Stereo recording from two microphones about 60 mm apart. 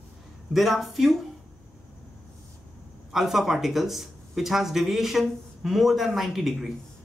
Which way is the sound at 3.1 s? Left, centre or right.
Centre.